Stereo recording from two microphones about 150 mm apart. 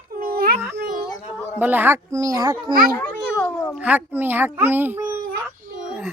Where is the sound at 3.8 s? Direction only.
10° right (ahead or behind).